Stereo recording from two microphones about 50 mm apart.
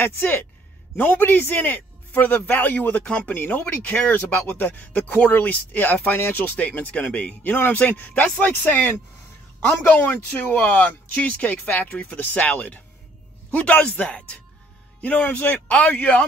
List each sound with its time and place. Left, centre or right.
0.2 s speech: left
3.3 s speech: left
7.1 s speech: centre
7.4 s speech: left